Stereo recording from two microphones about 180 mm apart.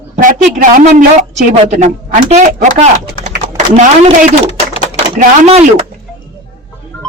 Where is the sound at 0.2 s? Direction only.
45° right (ahead or behind).